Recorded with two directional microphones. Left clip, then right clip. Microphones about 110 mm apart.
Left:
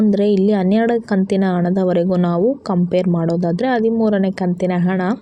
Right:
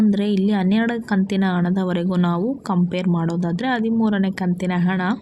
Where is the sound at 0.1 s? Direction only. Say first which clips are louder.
Left 6 dB; 25° left (ahead or behind).